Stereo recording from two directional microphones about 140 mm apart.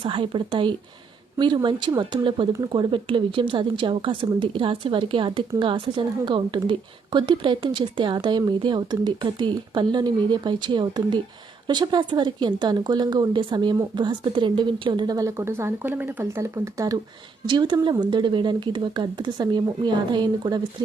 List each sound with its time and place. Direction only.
0.0 s a woman's voice: 40° right (ahead or behind)